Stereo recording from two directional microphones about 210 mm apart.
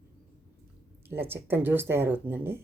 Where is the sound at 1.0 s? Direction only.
10° right (ahead or behind).